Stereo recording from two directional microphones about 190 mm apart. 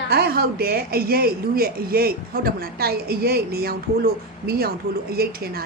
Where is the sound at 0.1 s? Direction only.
55° right (ahead or behind).